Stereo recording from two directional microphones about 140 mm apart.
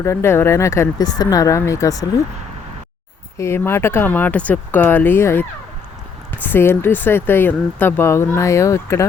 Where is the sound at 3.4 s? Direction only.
20° left (ahead or behind).